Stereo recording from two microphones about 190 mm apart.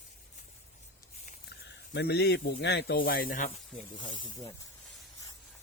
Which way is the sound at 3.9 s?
25° left (ahead or behind).